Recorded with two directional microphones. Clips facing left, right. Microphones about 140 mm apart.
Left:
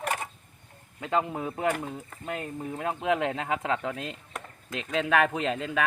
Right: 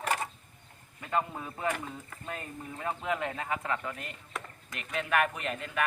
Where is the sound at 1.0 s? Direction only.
85° left.